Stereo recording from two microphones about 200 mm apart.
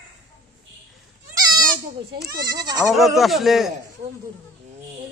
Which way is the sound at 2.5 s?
20° right (ahead or behind).